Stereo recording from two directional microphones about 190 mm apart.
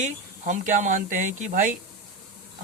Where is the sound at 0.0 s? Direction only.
40° right (ahead or behind).